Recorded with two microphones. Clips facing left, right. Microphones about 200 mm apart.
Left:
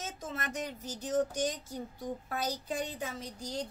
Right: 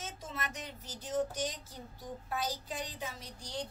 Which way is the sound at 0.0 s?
45° left (ahead or behind).